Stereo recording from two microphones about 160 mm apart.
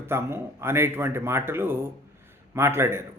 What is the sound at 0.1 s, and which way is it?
Speech, 15° right (ahead or behind).